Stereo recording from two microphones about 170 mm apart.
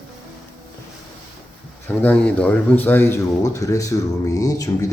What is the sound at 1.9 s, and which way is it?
Speech, 10° left (ahead or behind).